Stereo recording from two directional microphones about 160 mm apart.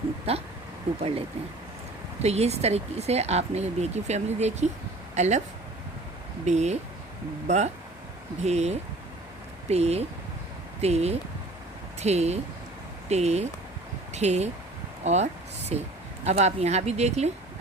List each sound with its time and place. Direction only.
0.3 s speech: 40° right (ahead or behind)
2.2 s speech: 40° right (ahead or behind)
6.4 s speech: 45° right (ahead or behind)